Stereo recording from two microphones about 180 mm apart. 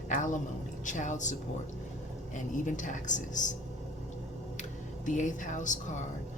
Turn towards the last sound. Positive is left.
turn(degrees=45)  # may be behind; listen again after turning